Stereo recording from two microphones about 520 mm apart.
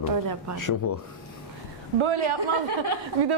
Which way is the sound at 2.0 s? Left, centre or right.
Right.